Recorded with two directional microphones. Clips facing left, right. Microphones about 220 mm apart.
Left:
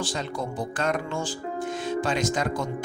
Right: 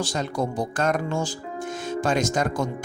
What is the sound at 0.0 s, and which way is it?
Speech, 45° right (ahead or behind).